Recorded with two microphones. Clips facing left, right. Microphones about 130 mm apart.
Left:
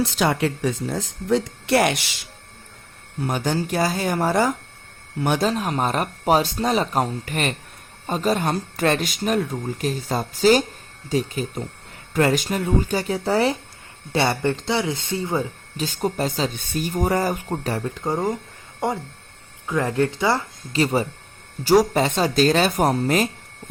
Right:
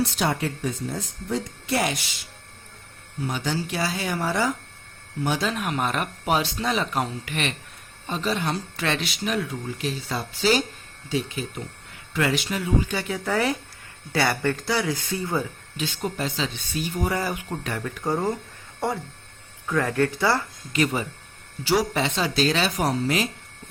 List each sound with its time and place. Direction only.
0.2 s speech: 90° left; by 2.0 s 70° left (ahead or behind)
3.2 s speech: 50° left (ahead or behind)
5.4 s speech: 35° left (ahead or behind)
15.8 s speech: 40° left (ahead or behind); by 20.4 s 20° left (ahead or behind)
20.7 s speech: 35° left (ahead or behind)